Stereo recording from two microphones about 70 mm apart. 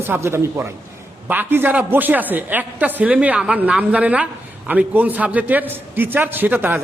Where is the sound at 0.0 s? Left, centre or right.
Right.